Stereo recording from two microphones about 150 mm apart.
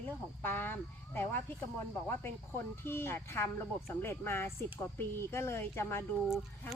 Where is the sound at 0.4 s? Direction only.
15° left (ahead or behind).